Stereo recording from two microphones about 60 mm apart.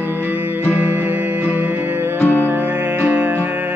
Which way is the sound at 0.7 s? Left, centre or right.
Right.